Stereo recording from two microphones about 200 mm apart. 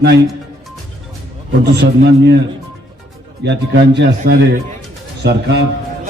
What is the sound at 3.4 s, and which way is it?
A man's voice, 60° right (ahead or behind).